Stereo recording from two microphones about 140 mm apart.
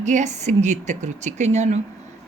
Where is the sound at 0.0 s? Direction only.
60° right (ahead or behind).